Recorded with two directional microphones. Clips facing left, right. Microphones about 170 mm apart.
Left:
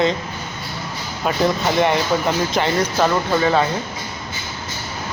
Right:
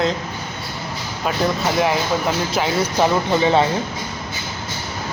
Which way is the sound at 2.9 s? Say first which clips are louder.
Right 3 dB; 15° right (ahead or behind).